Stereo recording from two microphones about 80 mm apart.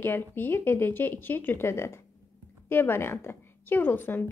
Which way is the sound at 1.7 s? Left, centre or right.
Left.